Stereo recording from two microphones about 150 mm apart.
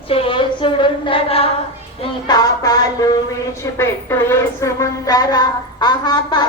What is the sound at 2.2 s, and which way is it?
A woman's voice, 25° left (ahead or behind).